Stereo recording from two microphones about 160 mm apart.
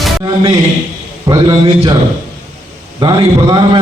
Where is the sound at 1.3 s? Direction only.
25° right (ahead or behind).